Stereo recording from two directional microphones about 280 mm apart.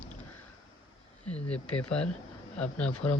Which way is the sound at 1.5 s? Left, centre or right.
Centre.